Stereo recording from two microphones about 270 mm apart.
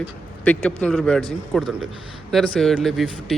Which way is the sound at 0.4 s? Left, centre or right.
Centre.